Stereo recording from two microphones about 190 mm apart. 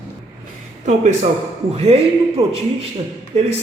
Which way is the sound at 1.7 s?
30° right (ahead or behind).